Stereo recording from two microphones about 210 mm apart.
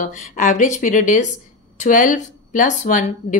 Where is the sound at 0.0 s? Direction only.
35° left (ahead or behind).